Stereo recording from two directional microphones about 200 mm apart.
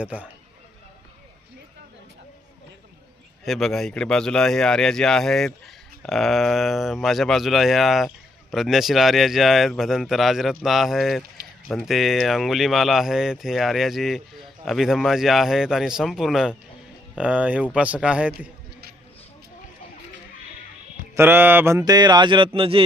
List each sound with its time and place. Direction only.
0.0 s speech: 5° right (ahead or behind)
3.4 s speech: centre (ahead or behind)
21.2 s a man's voice: 10° right (ahead or behind); by 22.8 s 25° right (ahead or behind)